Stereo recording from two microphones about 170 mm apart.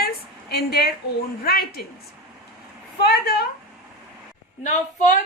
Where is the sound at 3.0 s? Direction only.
65° left (ahead or behind).